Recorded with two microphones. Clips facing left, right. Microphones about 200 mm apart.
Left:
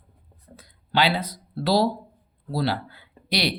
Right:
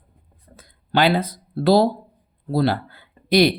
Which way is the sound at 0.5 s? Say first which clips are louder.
Right 4 dB; 50° right (ahead or behind).